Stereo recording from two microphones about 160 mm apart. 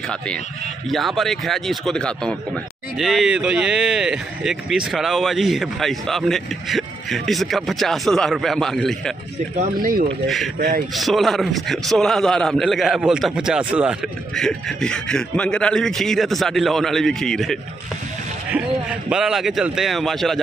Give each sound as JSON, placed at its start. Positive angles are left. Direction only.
{"t": 0.8, "sound": "speech", "side_deg": 0}
{"t": 9.6, "sound": "speech", "side_deg": -60}
{"t": 10.2, "sound": "speech", "side_deg": 0}
{"t": 14.3, "sound": "speech", "side_deg": 5}